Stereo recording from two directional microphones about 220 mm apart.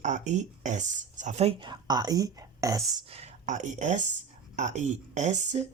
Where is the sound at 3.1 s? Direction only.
30° right (ahead or behind).